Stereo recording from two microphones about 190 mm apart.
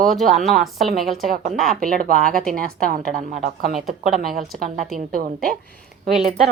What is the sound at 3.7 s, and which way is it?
Speech, centre (ahead or behind).